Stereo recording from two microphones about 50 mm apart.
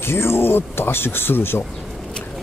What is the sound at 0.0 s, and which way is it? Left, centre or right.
Speech, left.